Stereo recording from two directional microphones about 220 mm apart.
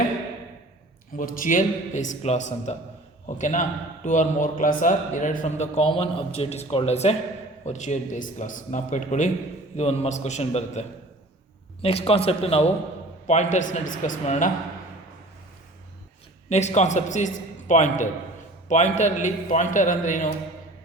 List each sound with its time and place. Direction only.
1.1 s a man's voice: 40° left (ahead or behind)
16.5 s a man's voice: 30° left (ahead or behind)